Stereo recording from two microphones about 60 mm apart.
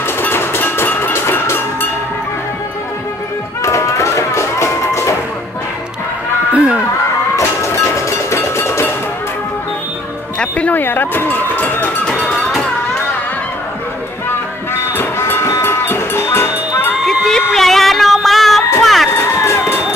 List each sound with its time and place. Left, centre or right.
0.0 s music: left
3.6 s music: left
6.5 s a sound: centre
7.3 s music: left
10.4 s music: left
10.8 s run: left
12.2 s music: centre
14.7 s music: left
17.0 s music: centre
18.8 s crowd: centre
19.1 s run: left